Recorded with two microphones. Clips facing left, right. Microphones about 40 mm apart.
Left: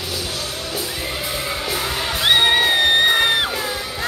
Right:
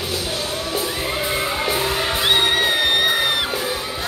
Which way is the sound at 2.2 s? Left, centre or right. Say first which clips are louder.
Left 4 dB; centre.